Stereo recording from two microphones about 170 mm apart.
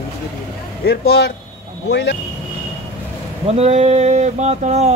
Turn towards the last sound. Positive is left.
turn(degrees=-40)  # may be behind; listen again after turning